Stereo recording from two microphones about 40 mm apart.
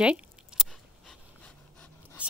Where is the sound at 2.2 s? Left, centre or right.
Right.